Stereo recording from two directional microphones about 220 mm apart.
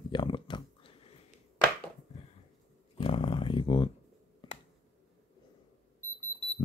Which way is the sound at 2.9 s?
25° left (ahead or behind).